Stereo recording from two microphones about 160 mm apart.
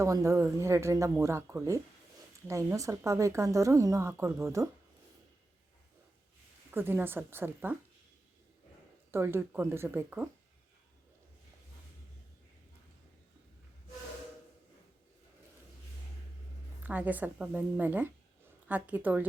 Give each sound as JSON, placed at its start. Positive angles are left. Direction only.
{"t": 0.0, "sound": "a woman's voice", "side_deg": -20}
{"t": 6.7, "sound": "a woman's voice", "side_deg": -15}
{"t": 9.1, "sound": "a woman's voice", "side_deg": -15}
{"t": 16.8, "sound": "a woman's voice", "side_deg": -10}